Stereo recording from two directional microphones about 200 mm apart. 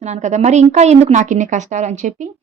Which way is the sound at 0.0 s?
35° right (ahead or behind).